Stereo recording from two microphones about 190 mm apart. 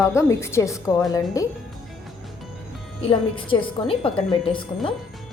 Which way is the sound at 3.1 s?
30° left (ahead or behind).